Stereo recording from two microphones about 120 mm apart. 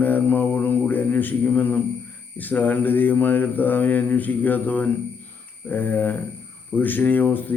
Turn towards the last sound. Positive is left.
turn(degrees=15)  # may be behind; listen again after turning